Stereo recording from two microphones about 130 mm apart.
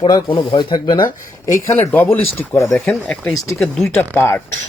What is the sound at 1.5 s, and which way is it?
Speech, 20° left (ahead or behind).